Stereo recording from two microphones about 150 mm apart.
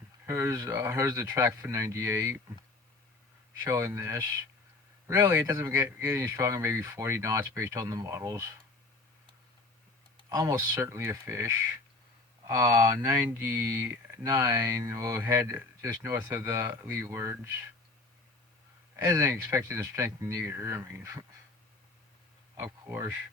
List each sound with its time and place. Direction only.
0.3 s speech: 20° right (ahead or behind)
3.6 s speech: 20° right (ahead or behind)
10.2 s speech: 25° right (ahead or behind)
12.5 s speech: 20° right (ahead or behind)
18.9 s speech: 15° right (ahead or behind)
22.5 s speech: 15° right (ahead or behind)